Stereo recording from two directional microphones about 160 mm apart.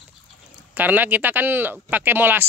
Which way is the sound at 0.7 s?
10° right (ahead or behind).